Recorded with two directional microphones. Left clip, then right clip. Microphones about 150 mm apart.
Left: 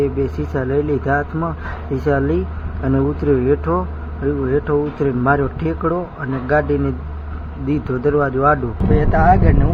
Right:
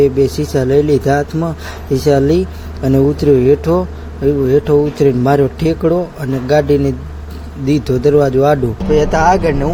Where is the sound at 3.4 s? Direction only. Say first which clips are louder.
Right 6 dB; 45° right (ahead or behind).